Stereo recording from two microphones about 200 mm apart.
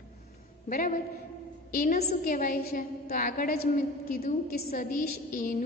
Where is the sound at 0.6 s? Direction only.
40° left (ahead or behind).